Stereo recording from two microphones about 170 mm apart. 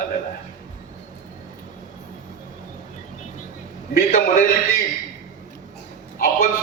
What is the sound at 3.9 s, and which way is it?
Speech, 55° left (ahead or behind).